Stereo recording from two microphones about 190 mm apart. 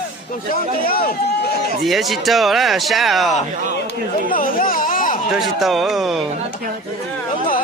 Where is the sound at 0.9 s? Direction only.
50° left (ahead or behind).